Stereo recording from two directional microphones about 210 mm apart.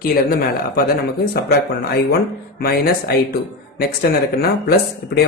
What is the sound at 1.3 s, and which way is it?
Speech, 50° left (ahead or behind).